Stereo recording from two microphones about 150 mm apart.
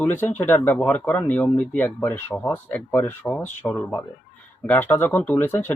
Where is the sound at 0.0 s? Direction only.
15° left (ahead or behind).